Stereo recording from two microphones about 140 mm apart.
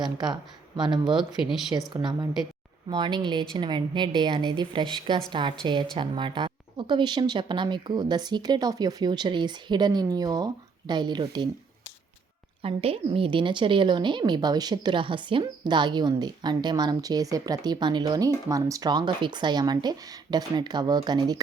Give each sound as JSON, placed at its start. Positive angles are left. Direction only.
{"t": 0.0, "sound": "a woman's voice", "side_deg": -30}
{"t": 12.6, "sound": "a woman's voice", "side_deg": -45}